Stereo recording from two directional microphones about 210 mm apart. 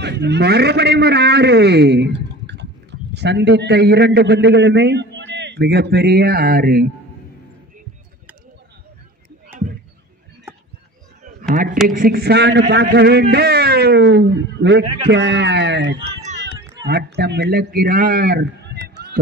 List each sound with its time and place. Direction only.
0.0 s a man's voice: 55° right (ahead or behind)
11.5 s a man's voice: 40° right (ahead or behind)